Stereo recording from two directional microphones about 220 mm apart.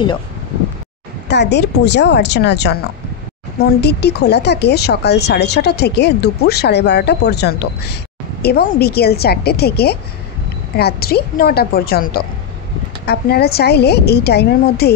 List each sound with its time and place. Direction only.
1.3 s speech: 50° left (ahead or behind)
3.8 s speech: 50° left (ahead or behind)